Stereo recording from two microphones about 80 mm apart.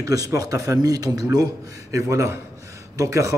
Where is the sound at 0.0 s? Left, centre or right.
Right.